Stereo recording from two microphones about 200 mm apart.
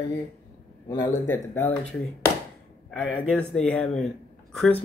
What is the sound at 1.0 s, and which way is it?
Speech, 10° left (ahead or behind).